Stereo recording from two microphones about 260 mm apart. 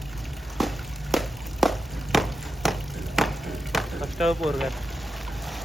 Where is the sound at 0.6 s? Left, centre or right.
Centre.